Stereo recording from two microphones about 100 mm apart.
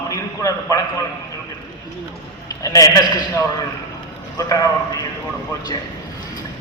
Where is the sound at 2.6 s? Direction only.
35° left (ahead or behind).